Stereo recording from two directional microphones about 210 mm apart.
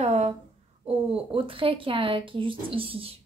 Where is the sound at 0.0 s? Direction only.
30° right (ahead or behind).